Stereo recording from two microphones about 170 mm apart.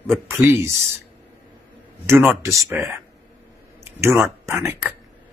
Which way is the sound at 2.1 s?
15° right (ahead or behind).